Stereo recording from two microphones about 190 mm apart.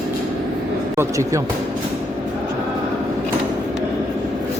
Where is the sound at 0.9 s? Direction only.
15° right (ahead or behind).